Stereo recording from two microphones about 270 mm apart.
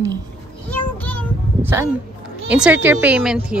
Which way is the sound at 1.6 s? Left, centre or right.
Centre.